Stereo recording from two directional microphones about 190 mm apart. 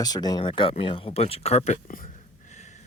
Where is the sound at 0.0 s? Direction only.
20° left (ahead or behind).